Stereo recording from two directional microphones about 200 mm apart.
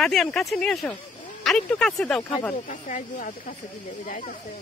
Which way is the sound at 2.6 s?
45° left (ahead or behind).